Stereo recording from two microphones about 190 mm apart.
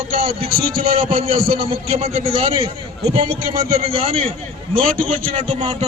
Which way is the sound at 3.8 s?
30° right (ahead or behind).